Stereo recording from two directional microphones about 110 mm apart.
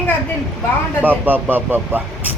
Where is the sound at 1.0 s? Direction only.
15° right (ahead or behind).